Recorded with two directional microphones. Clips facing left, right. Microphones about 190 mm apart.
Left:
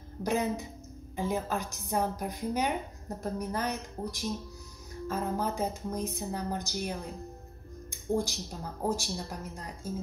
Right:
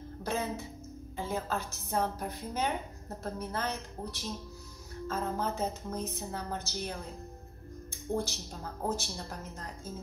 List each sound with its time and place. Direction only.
0.2 s speech: 15° left (ahead or behind)
7.9 s music: 15° left (ahead or behind)
8.8 s speech: 15° left (ahead or behind)